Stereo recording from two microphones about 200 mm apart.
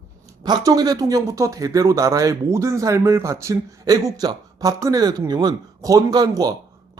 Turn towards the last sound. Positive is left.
turn(degrees=-20)  # may be behind; listen again after turning